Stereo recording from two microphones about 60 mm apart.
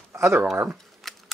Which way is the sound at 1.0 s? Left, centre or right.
Centre.